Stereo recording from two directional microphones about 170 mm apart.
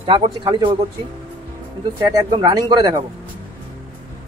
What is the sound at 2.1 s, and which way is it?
Speech, 25° right (ahead or behind).